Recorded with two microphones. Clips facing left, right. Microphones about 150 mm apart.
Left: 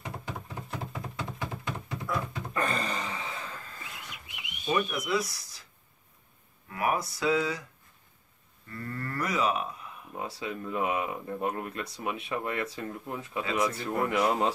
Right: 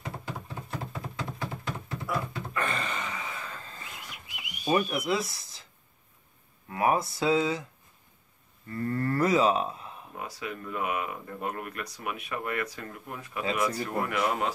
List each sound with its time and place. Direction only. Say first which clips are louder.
0.0 s a sound: right 1 dB; centre (ahead or behind)
2.5 s a sound: left 2 dB; 40° left (ahead or behind)
4.4 s whistling: right 3 dB; 25° right (ahead or behind)
6.7 s cattle: right 3 dB; 25° right (ahead or behind)
8.7 s cattle: right 7 dB; 25° right (ahead or behind)
10.1 s speech: left 2 dB; 25° left (ahead or behind)